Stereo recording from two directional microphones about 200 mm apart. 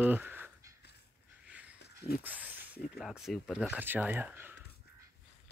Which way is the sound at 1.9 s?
50° left (ahead or behind).